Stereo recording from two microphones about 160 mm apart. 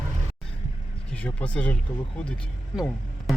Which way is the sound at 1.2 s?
10° left (ahead or behind).